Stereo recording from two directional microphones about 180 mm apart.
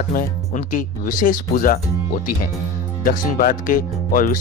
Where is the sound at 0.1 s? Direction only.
45° left (ahead or behind).